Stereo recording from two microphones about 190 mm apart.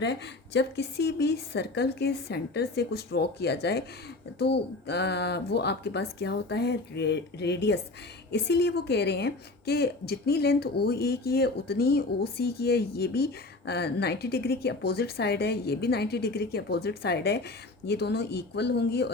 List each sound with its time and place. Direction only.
0.0 s a woman's voice: 65° left (ahead or behind)